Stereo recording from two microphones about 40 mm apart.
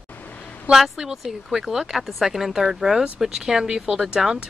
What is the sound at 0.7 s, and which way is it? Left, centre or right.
Speech, centre.